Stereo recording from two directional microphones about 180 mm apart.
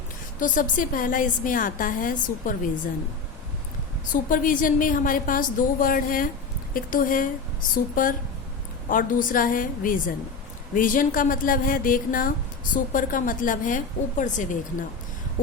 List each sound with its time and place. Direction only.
0.3 s a woman's voice: 45° left (ahead or behind)
4.1 s a woman's voice: 50° left (ahead or behind)
8.9 s a woman's voice: 50° left (ahead or behind)